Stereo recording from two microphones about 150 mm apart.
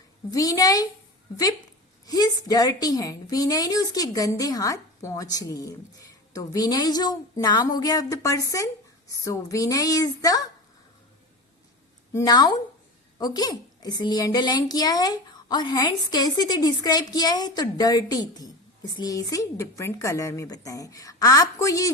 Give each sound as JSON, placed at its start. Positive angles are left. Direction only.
{"t": 0.3, "sound": "a woman's voice", "side_deg": 25}
{"t": 2.0, "sound": "a woman's voice", "side_deg": 25}
{"t": 12.1, "sound": "a woman's voice", "side_deg": 25}